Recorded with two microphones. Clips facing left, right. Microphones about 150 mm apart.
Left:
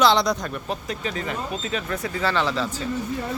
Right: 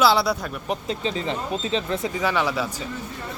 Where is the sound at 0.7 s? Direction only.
25° right (ahead or behind).